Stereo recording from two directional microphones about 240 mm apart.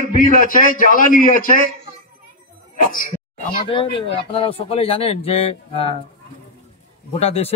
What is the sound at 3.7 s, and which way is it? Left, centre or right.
Speech, left.